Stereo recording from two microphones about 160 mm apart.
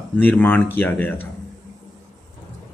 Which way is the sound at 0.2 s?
10° left (ahead or behind).